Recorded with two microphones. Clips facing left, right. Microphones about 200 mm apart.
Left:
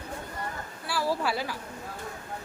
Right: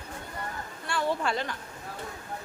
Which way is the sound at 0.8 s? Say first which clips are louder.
Even; 5° left (ahead or behind).